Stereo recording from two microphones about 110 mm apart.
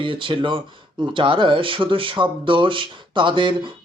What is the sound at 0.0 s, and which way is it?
Speech, 50° right (ahead or behind).